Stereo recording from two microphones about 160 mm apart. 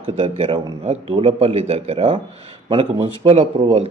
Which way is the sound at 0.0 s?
35° right (ahead or behind).